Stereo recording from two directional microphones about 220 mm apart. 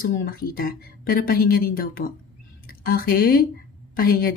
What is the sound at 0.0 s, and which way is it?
Speech, 40° left (ahead or behind).